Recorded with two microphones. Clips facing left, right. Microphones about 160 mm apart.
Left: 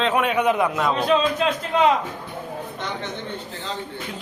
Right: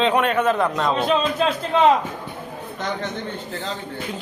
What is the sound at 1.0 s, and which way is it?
Speech, 25° right (ahead or behind).